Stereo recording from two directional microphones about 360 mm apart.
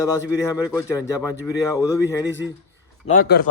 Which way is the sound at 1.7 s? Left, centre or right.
Centre.